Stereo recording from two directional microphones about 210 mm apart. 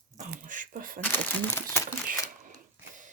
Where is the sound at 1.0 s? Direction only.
10° left (ahead or behind).